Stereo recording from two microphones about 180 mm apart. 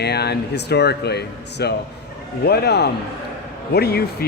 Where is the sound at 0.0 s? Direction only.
65° left (ahead or behind).